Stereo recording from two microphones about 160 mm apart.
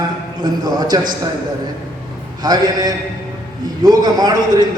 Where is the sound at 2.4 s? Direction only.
25° right (ahead or behind).